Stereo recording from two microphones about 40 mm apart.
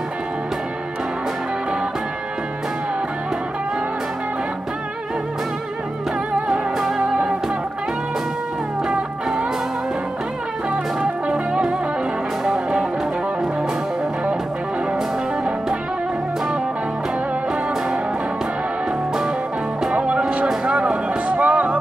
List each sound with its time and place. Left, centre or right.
10.7 s music: right
19.9 s music: right